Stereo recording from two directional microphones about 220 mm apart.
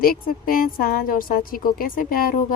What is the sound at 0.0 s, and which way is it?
A woman's voice, 40° left (ahead or behind).